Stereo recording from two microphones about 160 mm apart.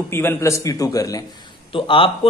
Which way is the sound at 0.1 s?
15° left (ahead or behind).